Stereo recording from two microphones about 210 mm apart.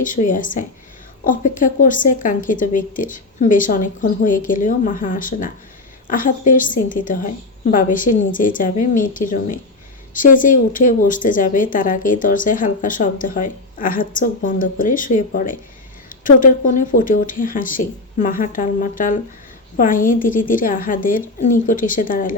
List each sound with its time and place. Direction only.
0.0 s a woman's voice: 40° left (ahead or behind)